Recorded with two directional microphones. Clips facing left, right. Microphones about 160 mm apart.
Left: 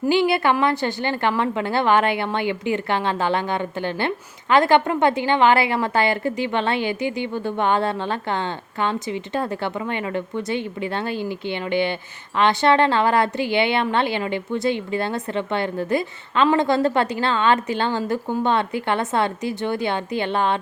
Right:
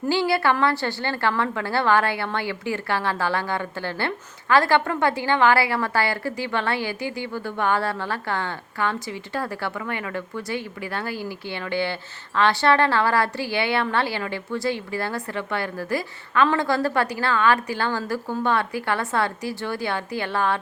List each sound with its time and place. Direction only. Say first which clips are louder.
0.1 s a woman's voice: left 2 dB; 20° left (ahead or behind)